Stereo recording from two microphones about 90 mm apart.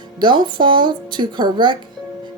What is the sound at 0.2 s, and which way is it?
A woman's voice, 60° right (ahead or behind).